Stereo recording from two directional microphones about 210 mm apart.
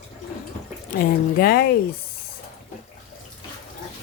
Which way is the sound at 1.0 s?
45° left (ahead or behind).